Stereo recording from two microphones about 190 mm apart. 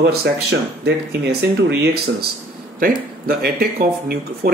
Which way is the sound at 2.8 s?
50° right (ahead or behind).